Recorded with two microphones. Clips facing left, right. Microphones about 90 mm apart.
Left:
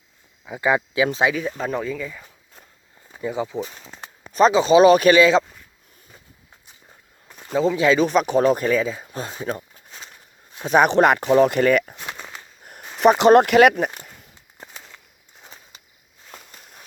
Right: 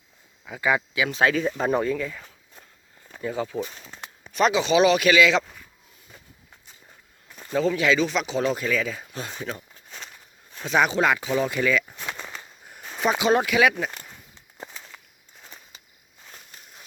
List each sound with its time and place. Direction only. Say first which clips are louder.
0.6 s speech: left 4 dB; 25° left (ahead or behind)
1.2 s speech: right 4 dB; 10° left (ahead or behind)
1.5 s speech: right 2 dB; 5° right (ahead or behind)
3.1 s speech: left 3 dB; 15° left (ahead or behind)
4.3 s speech: left 6 dB; 35° left (ahead or behind)
7.8 s speech: left 5 dB; 40° left (ahead or behind)
8.8 s speech: left 4 dB; 30° left (ahead or behind)
10.7 s speech: left 6 dB; 50° left (ahead or behind)